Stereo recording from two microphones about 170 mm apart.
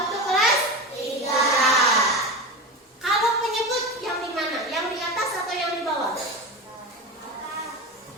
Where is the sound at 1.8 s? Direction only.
20° left (ahead or behind).